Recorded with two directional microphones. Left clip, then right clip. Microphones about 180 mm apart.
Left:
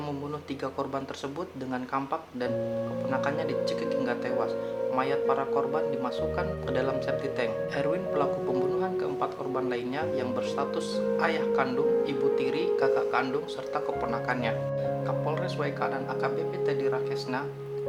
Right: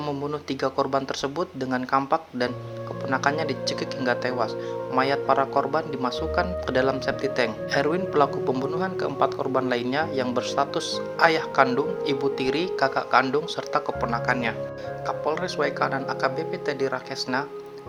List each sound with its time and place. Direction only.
0.6 s speech: 40° right (ahead or behind)